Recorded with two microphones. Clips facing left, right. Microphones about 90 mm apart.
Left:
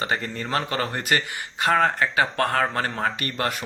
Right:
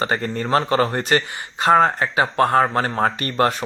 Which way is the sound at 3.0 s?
35° right (ahead or behind).